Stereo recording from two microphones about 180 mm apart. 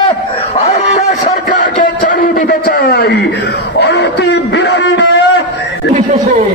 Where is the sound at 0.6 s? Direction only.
40° left (ahead or behind); by 5.2 s 75° left (ahead or behind).